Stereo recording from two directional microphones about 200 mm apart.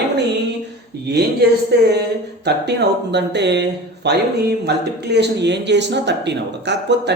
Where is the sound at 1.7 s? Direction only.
55° right (ahead or behind).